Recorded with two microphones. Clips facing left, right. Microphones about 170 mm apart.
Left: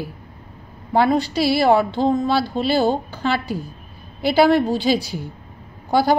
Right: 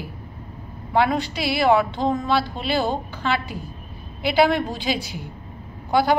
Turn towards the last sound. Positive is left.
turn(degrees=35)  # may be behind; listen again after turning